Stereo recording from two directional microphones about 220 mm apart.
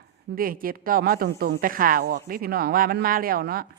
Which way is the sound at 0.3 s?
40° right (ahead or behind).